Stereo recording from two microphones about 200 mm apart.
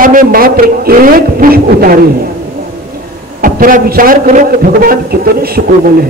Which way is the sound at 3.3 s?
45° right (ahead or behind).